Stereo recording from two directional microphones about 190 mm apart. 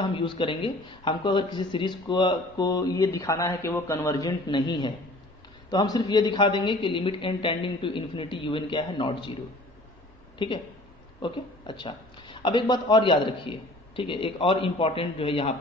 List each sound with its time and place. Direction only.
0.0 s speech: 25° left (ahead or behind)
10.4 s speech: 25° left (ahead or behind)